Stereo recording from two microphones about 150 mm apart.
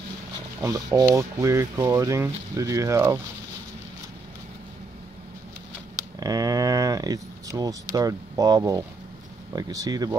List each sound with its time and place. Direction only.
0.6 s speech: 20° right (ahead or behind)
6.1 s speech: 25° right (ahead or behind)